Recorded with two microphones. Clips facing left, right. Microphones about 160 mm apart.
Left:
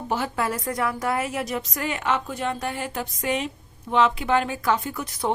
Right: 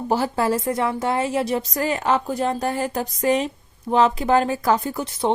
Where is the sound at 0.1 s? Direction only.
35° right (ahead or behind).